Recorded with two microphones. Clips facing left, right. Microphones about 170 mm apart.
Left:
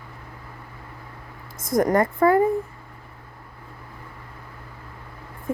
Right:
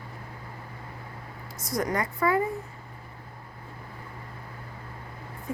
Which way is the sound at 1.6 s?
50° left (ahead or behind).